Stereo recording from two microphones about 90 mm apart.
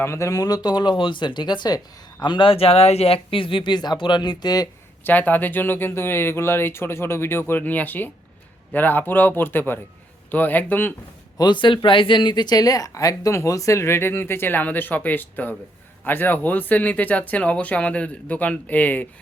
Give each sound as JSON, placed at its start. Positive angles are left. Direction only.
{"t": 0.0, "sound": "speech", "side_deg": 35}
{"t": 2.2, "sound": "speech", "side_deg": 65}
{"t": 5.0, "sound": "speech", "side_deg": 20}
{"t": 11.3, "sound": "speech", "side_deg": 60}